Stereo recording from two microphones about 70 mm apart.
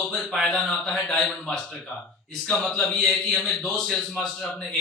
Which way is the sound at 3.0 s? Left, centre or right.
Centre.